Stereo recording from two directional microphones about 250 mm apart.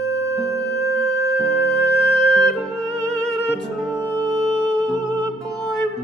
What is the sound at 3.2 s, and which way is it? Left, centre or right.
Music, centre.